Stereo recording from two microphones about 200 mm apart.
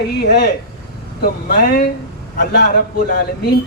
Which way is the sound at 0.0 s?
55° left (ahead or behind).